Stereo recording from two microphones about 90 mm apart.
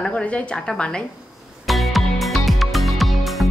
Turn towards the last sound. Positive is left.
turn(degrees=0)  # may be behind; listen again after turning